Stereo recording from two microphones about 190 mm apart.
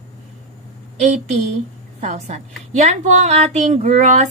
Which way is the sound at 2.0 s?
40° right (ahead or behind).